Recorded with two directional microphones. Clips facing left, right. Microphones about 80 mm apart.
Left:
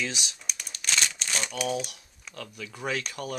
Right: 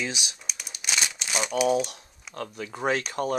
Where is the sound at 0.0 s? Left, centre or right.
Centre.